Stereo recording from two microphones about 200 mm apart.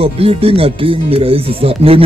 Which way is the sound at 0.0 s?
30° right (ahead or behind).